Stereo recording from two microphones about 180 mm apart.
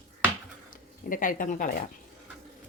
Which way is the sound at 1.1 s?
50° left (ahead or behind).